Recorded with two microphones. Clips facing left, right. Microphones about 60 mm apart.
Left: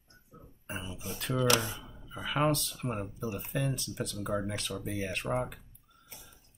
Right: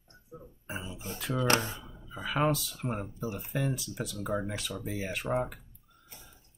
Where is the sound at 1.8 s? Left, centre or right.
Centre.